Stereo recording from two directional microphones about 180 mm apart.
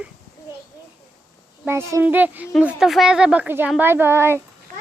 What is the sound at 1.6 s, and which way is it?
Speech, 15° right (ahead or behind).